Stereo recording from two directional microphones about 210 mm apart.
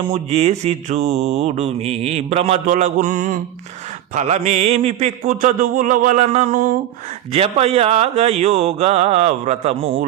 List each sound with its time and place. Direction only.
0.0 s mantra: 25° right (ahead or behind)